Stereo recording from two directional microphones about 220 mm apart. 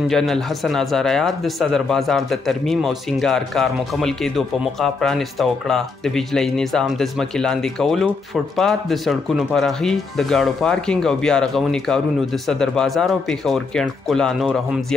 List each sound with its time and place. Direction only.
0.1 s speech: centre (ahead or behind)